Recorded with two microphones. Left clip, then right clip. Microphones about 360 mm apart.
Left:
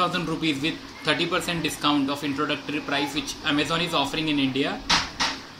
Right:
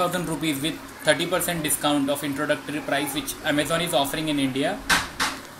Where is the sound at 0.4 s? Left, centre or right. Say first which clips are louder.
Left 1 dB; centre.